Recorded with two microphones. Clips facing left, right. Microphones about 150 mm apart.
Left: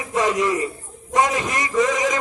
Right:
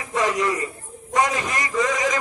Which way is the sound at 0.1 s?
20° left (ahead or behind).